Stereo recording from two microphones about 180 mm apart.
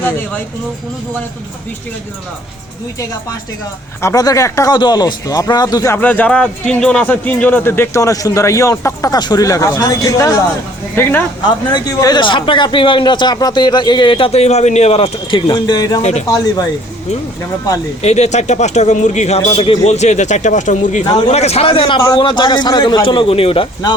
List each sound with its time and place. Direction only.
4.0 s speech: 20° left (ahead or behind)
16.0 s speech: 40° left (ahead or behind)
18.0 s speech: 40° left (ahead or behind)